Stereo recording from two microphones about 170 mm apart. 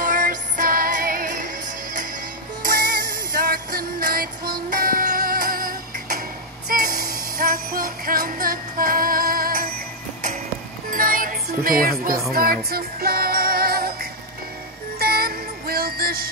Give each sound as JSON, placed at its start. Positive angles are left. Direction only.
{"t": 0.0, "sound": "music", "side_deg": -50}
{"t": 2.6, "sound": "music", "side_deg": -55}
{"t": 6.7, "sound": "jingle bell", "side_deg": -55}
{"t": 10.9, "sound": "music", "side_deg": -55}
{"t": 15.0, "sound": "music", "side_deg": -65}